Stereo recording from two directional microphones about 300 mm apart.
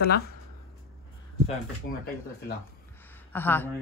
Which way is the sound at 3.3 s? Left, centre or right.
Centre.